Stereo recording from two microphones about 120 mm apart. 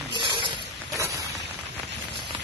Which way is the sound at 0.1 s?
40° right (ahead or behind).